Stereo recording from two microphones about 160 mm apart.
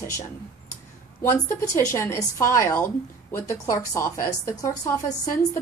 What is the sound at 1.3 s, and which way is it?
A woman's voice, 20° left (ahead or behind).